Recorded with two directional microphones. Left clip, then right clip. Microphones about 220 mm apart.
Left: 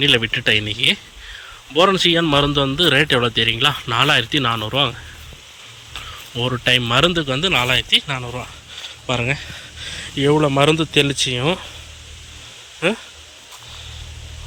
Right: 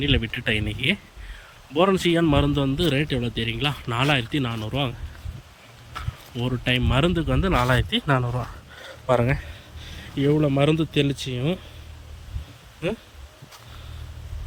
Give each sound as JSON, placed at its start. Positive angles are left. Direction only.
{"t": 0.0, "sound": "a man's voice", "side_deg": -10}
{"t": 6.3, "sound": "a man's voice", "side_deg": -10}
{"t": 8.0, "sound": "a sound", "side_deg": -40}
{"t": 9.2, "sound": "speech", "side_deg": -15}